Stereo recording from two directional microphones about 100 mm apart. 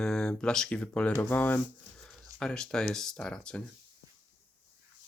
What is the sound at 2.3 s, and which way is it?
Speech, 5° left (ahead or behind).